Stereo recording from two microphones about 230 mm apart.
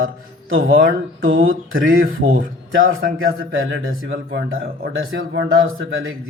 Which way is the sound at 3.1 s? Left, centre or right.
Right.